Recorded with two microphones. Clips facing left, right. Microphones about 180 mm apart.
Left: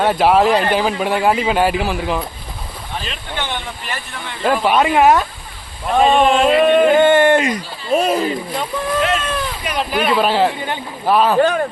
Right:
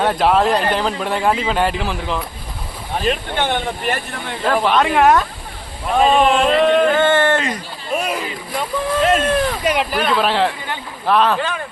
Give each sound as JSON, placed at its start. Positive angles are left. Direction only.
{"t": 0.0, "sound": "a man's voice", "side_deg": 5}
{"t": 3.0, "sound": "speech", "side_deg": -50}
{"t": 4.4, "sound": "speech", "side_deg": 10}
{"t": 7.9, "sound": "speech", "side_deg": 30}
{"t": 9.0, "sound": "speech", "side_deg": -50}
{"t": 9.9, "sound": "a man's voice", "side_deg": 0}
{"t": 11.3, "sound": "speech", "side_deg": 45}